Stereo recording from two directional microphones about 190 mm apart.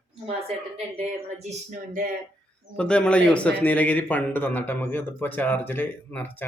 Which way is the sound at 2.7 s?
5° left (ahead or behind).